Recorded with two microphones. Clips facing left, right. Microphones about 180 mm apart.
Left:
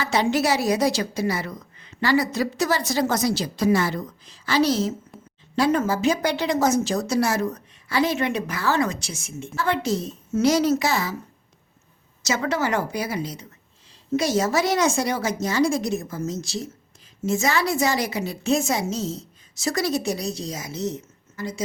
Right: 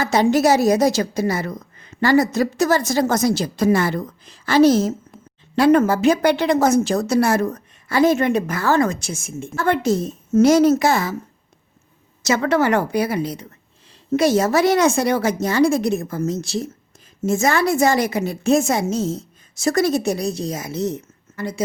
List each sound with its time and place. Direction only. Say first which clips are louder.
0.0 s speech: right 6 dB; 45° right (ahead or behind)
5.5 s speech: right 6 dB; 60° right (ahead or behind)
12.2 s a woman's voice: right 6 dB; 60° right (ahead or behind)